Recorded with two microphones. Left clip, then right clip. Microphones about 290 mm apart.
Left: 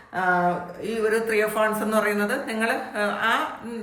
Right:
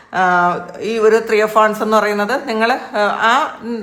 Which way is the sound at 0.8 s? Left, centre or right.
Centre.